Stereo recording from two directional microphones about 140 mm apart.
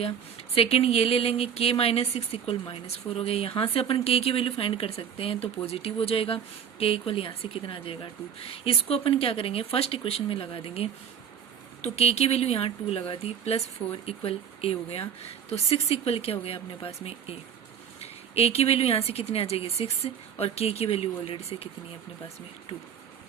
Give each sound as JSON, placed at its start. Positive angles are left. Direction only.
{"t": 0.5, "sound": "speech", "side_deg": 45}